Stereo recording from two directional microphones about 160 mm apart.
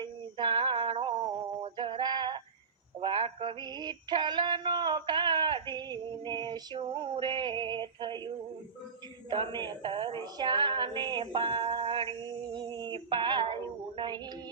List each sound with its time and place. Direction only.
0.0 s a sound: 30° right (ahead or behind)
3.0 s synthetic singing: 35° right (ahead or behind)
9.3 s a woman's voice: 30° right (ahead or behind)
10.3 s female singing: 30° right (ahead or behind)